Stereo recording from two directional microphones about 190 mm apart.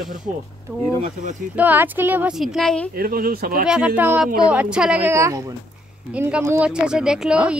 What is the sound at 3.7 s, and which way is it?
Speech, 5° right (ahead or behind).